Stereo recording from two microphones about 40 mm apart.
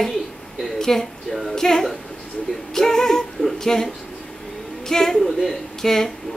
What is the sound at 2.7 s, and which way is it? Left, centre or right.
Music, centre.